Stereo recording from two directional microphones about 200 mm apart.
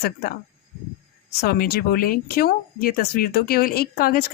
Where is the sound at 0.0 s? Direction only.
50° left (ahead or behind).